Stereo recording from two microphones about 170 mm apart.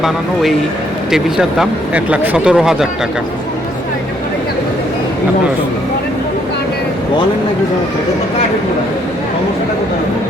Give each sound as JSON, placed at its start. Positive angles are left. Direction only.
{"t": 1.1, "sound": "speech", "side_deg": -5}